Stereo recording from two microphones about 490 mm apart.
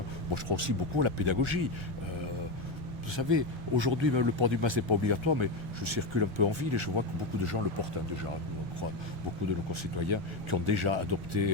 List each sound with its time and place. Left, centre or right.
0.4 s speech: right
3.2 s speech: right
7.4 s speech: right
10.1 s speech: right